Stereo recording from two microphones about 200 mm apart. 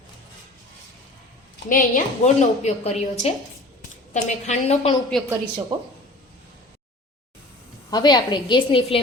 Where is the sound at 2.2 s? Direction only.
40° left (ahead or behind).